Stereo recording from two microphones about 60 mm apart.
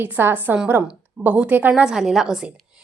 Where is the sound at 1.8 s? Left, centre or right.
Centre.